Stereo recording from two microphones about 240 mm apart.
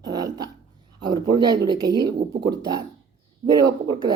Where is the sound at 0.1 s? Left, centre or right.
Centre.